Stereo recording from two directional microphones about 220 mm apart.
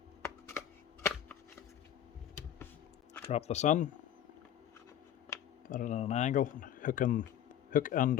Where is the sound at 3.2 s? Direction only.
30° left (ahead or behind).